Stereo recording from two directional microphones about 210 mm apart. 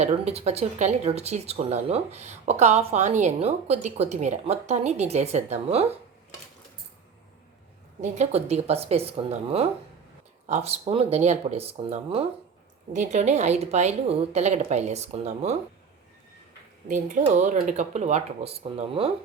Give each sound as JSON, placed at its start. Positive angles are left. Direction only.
{"t": 0.0, "sound": "speech", "side_deg": -30}
{"t": 8.0, "sound": "speech", "side_deg": -35}
{"t": 16.9, "sound": "speech", "side_deg": -35}